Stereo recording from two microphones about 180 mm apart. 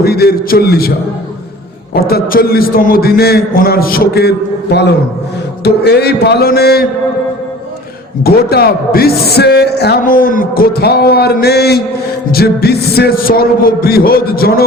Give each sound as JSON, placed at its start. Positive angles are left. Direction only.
{"t": 0.0, "sound": "a man's voice", "side_deg": 60}
{"t": 2.0, "sound": "a man's voice", "side_deg": 60}
{"t": 8.2, "sound": "a man's voice", "side_deg": 60}